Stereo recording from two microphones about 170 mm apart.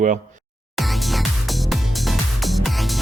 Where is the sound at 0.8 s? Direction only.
Centre (ahead or behind).